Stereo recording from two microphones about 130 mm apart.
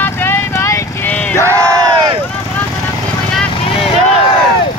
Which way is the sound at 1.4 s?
25° right (ahead or behind).